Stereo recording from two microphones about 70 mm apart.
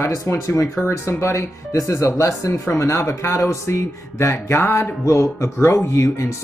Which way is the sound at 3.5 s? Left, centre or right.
Left.